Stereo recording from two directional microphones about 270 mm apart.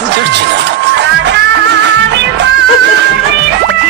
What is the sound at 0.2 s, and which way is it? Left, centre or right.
Music, right.